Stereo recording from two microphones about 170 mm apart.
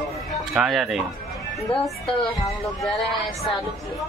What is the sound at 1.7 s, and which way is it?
Speech, 35° left (ahead or behind).